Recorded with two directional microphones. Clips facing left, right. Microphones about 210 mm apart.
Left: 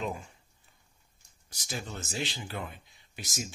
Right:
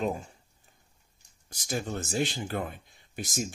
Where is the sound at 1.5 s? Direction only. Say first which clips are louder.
Right 6 dB; 50° right (ahead or behind).